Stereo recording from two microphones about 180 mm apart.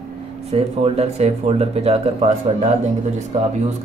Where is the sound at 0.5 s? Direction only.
35° right (ahead or behind).